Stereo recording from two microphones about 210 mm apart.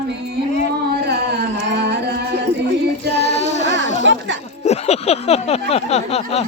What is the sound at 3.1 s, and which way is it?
Child singing, 30° left (ahead or behind).